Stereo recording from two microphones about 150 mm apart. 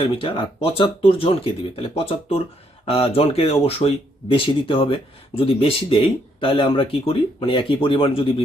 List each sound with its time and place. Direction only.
0.0 s speech: 35° left (ahead or behind)